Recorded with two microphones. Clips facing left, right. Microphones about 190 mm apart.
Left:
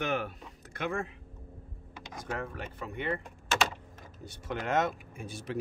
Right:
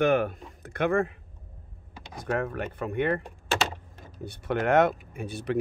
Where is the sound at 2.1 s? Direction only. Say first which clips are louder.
Right 8 dB; 65° right (ahead or behind).